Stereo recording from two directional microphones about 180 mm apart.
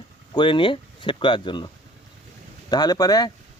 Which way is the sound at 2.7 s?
20° left (ahead or behind).